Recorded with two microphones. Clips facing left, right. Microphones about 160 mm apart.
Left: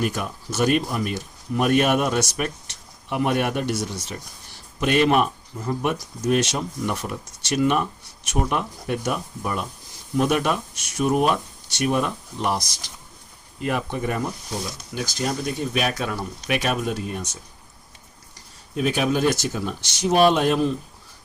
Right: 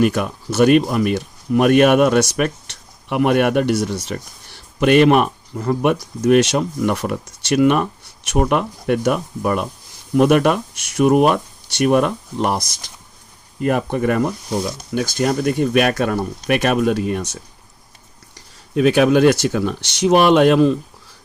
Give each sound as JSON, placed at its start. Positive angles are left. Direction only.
{"t": 0.0, "sound": "speech", "side_deg": -70}
{"t": 18.7, "sound": "speech", "side_deg": -75}